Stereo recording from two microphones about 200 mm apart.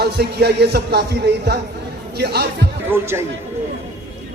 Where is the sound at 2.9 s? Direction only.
10° right (ahead or behind).